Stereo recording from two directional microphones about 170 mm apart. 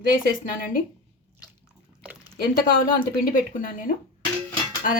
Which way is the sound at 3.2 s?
55° left (ahead or behind).